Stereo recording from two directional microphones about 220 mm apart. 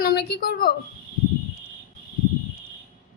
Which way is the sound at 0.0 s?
45° left (ahead or behind).